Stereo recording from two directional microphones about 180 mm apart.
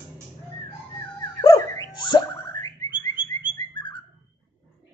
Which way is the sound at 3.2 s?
25° left (ahead or behind).